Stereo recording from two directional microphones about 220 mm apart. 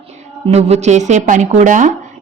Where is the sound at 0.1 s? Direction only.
30° right (ahead or behind).